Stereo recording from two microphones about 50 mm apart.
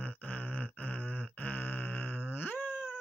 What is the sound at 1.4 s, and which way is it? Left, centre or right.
Groan, left.